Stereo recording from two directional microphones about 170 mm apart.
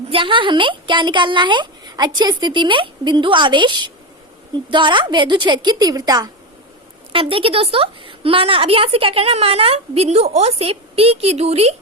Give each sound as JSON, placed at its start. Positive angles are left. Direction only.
{"t": 0.1, "sound": "a woman's voice", "side_deg": -30}